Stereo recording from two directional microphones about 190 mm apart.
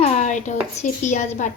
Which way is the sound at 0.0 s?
40° left (ahead or behind).